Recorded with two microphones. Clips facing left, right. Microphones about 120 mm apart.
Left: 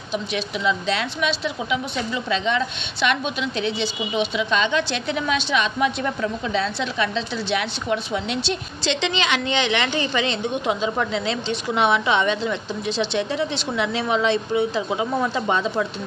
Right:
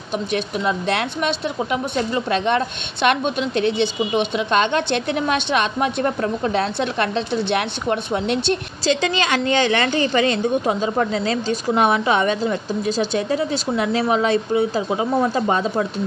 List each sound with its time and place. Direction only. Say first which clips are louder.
0.1 s a woman's voice: right 3 dB; 55° right (ahead or behind); by 15.6 s 40° right (ahead or behind)